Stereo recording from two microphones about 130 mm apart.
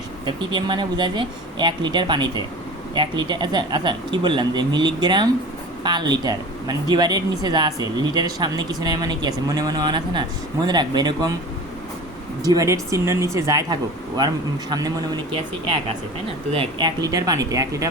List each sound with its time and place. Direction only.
0.3 s speech: 35° right (ahead or behind)
12.4 s speech: 30° right (ahead or behind)
16.5 s speech: 40° right (ahead or behind); by 17.8 s 25° right (ahead or behind)